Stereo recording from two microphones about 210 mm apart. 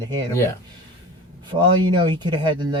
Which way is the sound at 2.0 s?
20° right (ahead or behind).